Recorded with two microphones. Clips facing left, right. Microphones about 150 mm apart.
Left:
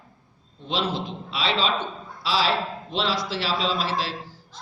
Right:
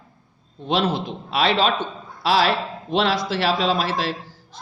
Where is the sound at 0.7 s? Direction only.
55° right (ahead or behind).